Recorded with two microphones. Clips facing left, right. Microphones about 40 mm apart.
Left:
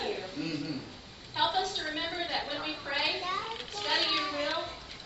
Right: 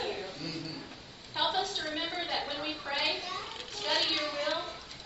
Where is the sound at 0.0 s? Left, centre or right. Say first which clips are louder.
Left 1 dB; centre.